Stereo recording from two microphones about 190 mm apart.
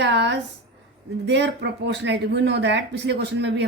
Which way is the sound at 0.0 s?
65° right (ahead or behind).